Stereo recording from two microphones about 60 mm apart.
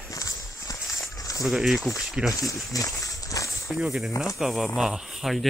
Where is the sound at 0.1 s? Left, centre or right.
Left.